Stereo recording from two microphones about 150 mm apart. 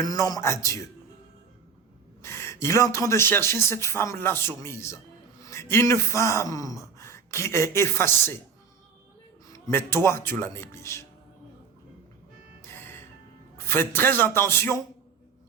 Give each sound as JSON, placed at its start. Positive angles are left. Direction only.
{"t": 0.0, "sound": "a man's voice", "side_deg": 25}
{"t": 2.2, "sound": "speech", "side_deg": 15}
{"t": 9.5, "sound": "speech", "side_deg": 15}
{"t": 12.6, "sound": "music", "side_deg": 15}
{"t": 13.7, "sound": "speech", "side_deg": 15}